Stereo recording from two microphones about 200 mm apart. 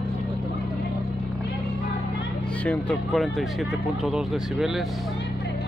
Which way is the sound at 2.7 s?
5° left (ahead or behind).